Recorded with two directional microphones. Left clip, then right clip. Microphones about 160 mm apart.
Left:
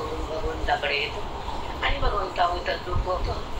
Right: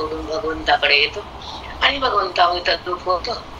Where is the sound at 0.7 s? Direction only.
50° right (ahead or behind).